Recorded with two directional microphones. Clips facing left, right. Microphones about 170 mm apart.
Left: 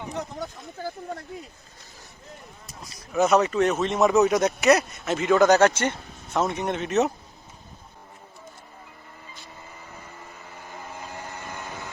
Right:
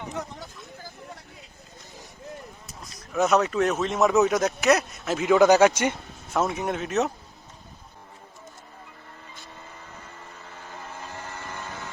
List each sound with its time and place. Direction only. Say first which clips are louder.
0.3 s speech: left 7 dB; 65° left (ahead or behind)
2.8 s speech: left 2 dB; centre (ahead or behind)
10.6 s a sound: left 1 dB; 15° left (ahead or behind)